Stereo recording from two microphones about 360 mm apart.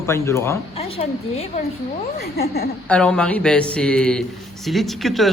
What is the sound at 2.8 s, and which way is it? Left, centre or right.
A man's voice, centre.